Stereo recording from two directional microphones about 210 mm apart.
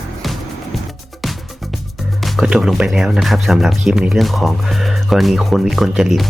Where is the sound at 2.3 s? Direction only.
5° right (ahead or behind).